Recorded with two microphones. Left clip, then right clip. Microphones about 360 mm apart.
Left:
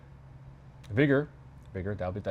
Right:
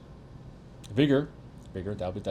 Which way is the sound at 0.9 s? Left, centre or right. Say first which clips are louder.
Right 1 dB; left.